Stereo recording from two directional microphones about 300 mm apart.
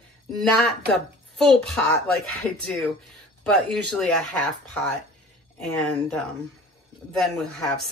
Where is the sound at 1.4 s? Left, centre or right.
Centre.